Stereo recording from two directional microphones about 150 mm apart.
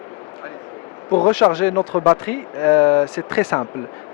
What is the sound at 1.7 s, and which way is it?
Speech, 25° left (ahead or behind).